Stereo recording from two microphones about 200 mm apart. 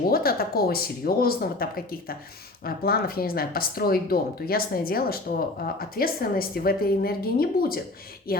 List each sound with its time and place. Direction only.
0.1 s speech: 50° left (ahead or behind)